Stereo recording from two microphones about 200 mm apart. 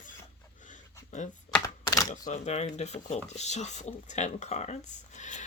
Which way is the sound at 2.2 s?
35° left (ahead or behind).